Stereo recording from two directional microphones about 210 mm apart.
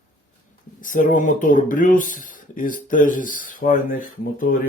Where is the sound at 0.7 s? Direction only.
40° left (ahead or behind).